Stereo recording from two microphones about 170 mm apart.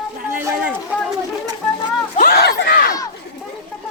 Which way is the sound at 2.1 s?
65° left (ahead or behind).